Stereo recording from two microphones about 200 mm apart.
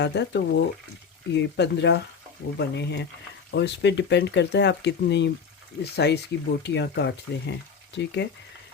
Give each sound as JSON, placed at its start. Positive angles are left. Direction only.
{"t": 0.0, "sound": "speech", "side_deg": 60}